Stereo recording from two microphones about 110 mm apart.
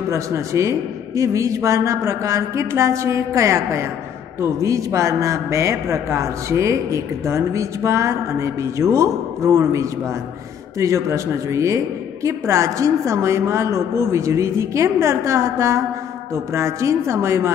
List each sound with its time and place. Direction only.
0.1 s a man's voice: 30° right (ahead or behind)